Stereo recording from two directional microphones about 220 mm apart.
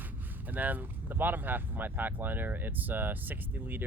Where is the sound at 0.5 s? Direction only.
5° right (ahead or behind).